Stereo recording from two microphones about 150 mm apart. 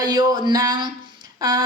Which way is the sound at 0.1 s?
25° right (ahead or behind).